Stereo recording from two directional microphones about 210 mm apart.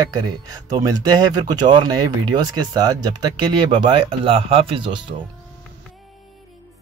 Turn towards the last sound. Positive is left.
turn(degrees=-25)  # may be behind; listen again after turning